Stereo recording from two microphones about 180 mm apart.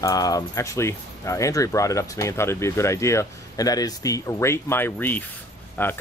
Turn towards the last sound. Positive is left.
turn(degrees=10)  # may be behind; listen again after turning